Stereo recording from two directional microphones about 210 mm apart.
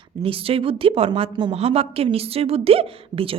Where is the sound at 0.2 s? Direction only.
25° right (ahead or behind).